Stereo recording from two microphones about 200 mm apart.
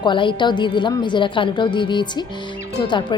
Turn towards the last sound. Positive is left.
turn(degrees=20)  # may be behind; listen again after turning